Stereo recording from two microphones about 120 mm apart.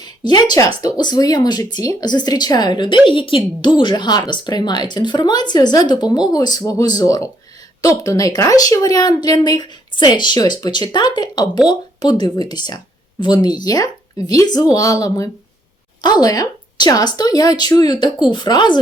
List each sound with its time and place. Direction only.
0.0 s a woman's voice: 35° left (ahead or behind)